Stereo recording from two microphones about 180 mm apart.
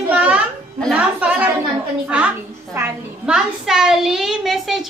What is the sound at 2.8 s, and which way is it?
A child's voice, 5° right (ahead or behind).